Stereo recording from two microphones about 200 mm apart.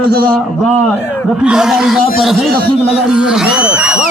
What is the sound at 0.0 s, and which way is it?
Speech, 50° right (ahead or behind).